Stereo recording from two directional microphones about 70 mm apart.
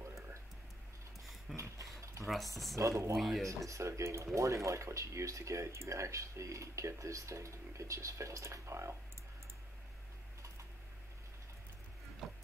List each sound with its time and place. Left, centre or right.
0.0 s music: right
1.6 s dog: right
2.2 s speech: centre
2.7 s speech: right
3.2 s speech: centre
3.4 s speech: right
12.2 s music: centre